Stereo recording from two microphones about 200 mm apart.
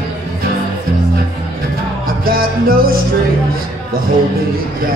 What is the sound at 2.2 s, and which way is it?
Music, 45° right (ahead or behind).